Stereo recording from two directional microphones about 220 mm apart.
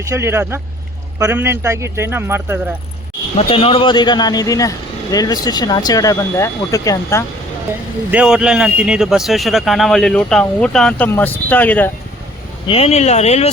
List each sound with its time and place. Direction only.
0.0 s speech: 10° right (ahead or behind)
3.3 s speech: 25° left (ahead or behind)
8.1 s a man's voice: 5° right (ahead or behind)
12.6 s speech: 25° left (ahead or behind)